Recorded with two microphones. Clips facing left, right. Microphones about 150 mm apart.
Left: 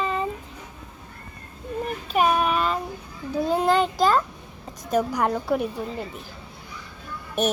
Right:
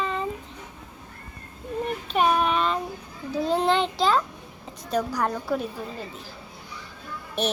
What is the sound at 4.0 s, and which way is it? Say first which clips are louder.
Speech: left 3 dB; 45° left (ahead or behind).